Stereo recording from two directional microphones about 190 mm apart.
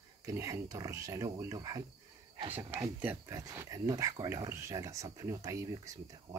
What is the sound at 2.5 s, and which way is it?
Speech, 10° right (ahead or behind).